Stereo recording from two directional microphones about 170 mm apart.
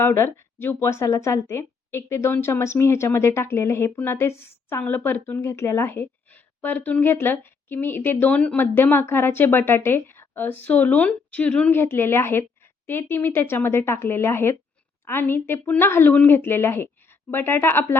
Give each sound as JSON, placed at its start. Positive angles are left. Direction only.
{"t": 0.0, "sound": "speech", "side_deg": 15}